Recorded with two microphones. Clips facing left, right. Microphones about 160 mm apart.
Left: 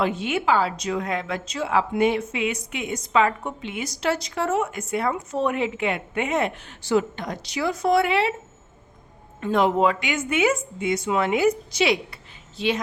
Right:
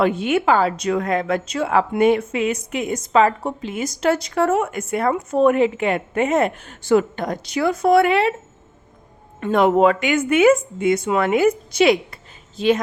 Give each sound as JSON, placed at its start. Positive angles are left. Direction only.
{"t": 0.0, "sound": "a woman's voice", "side_deg": -55}
{"t": 9.4, "sound": "a woman's voice", "side_deg": -55}